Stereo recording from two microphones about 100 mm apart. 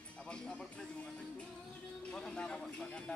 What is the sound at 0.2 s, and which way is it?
Music, 10° left (ahead or behind).